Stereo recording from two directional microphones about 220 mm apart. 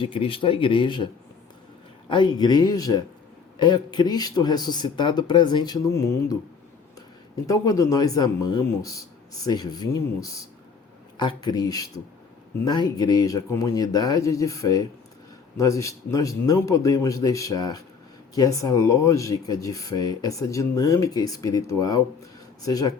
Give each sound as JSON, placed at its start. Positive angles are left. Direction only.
{"t": 0.0, "sound": "a man's voice", "side_deg": 25}
{"t": 7.4, "sound": "speech", "side_deg": 15}